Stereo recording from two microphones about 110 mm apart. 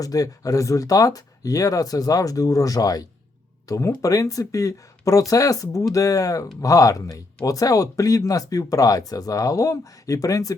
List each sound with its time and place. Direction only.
0.0 s speech: 30° left (ahead or behind)